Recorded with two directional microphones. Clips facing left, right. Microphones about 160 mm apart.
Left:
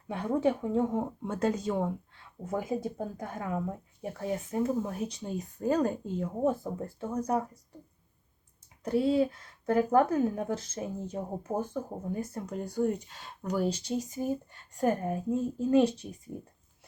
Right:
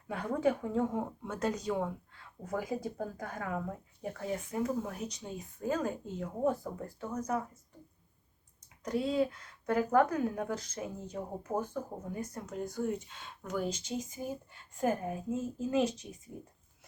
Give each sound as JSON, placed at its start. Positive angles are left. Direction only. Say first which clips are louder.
{"t": 0.1, "sound": "speech", "louder": "left 3 dB", "side_deg": 25}
{"t": 4.3, "sound": "speech", "louder": "left 4 dB", "side_deg": 35}
{"t": 6.4, "sound": "speech", "louder": "left 2 dB", "side_deg": 25}
{"t": 8.8, "sound": "speech", "louder": "left 5 dB", "side_deg": 30}